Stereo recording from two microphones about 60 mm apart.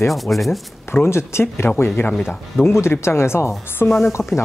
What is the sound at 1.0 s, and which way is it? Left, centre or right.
Speech, left.